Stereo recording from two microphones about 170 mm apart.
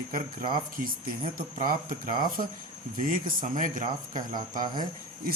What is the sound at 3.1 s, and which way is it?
Speech, 50° right (ahead or behind).